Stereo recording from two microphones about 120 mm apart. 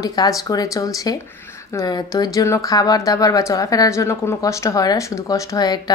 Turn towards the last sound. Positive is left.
turn(degrees=30)  # may be behind; listen again after turning